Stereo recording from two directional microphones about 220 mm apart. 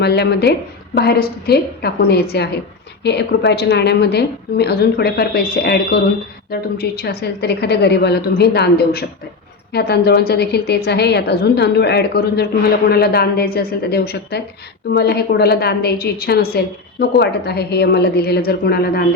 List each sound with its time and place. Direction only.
0.0 s a woman's voice: 50° left (ahead or behind)